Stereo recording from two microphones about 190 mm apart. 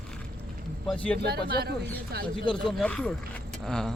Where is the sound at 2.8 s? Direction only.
5° left (ahead or behind).